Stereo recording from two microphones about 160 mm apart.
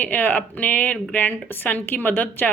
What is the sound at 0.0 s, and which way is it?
A woman's voice, 10° left (ahead or behind).